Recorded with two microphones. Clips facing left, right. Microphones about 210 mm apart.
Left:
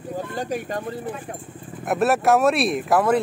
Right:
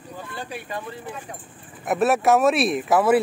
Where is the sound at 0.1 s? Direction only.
45° left (ahead or behind).